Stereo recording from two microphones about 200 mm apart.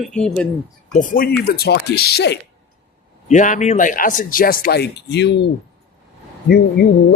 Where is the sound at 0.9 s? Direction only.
40° left (ahead or behind).